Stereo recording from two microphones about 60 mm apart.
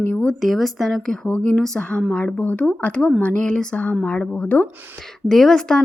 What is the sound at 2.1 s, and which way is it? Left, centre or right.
A woman's voice, left.